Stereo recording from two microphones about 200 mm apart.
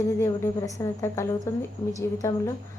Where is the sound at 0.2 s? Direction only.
15° left (ahead or behind).